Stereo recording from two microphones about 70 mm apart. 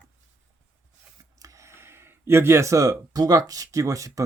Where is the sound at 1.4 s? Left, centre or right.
Right.